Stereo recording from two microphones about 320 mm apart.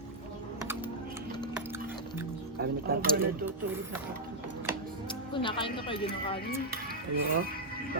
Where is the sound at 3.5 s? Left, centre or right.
Centre.